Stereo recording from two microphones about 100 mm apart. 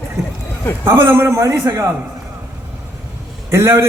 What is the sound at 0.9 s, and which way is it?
A man's voice, 25° right (ahead or behind).